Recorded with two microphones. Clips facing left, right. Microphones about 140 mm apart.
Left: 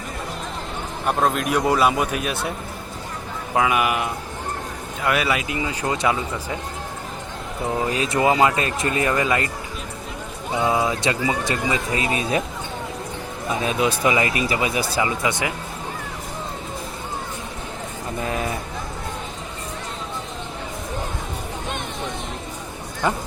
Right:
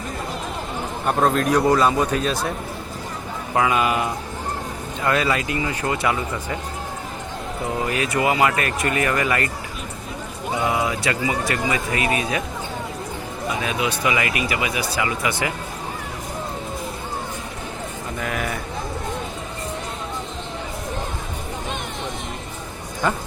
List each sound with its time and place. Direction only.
1.0 s speech: 5° left (ahead or behind)
3.5 s speech: 10° left (ahead or behind)
5.0 s speech: 10° left (ahead or behind)
7.9 s speech: 25° left (ahead or behind)
10.6 s speech: 25° left (ahead or behind)
13.5 s speech: 30° left (ahead or behind)
18.2 s speech: 25° left (ahead or behind)
23.0 s speech: 15° left (ahead or behind)